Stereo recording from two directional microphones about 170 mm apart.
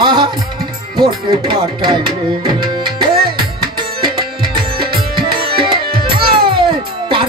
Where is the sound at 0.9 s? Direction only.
25° right (ahead or behind).